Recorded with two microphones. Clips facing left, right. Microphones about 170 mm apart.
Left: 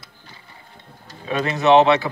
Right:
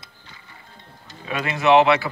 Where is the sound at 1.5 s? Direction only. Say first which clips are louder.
Left 1 dB; 20° left (ahead or behind).